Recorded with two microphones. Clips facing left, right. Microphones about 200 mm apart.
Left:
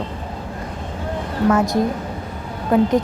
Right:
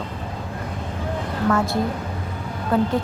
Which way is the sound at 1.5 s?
15° left (ahead or behind).